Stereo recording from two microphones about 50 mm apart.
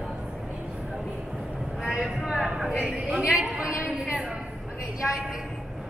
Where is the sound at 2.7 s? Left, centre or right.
Right.